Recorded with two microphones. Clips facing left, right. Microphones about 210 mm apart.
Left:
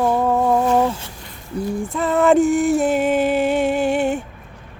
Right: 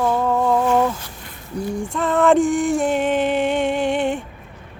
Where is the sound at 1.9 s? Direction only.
5° left (ahead or behind).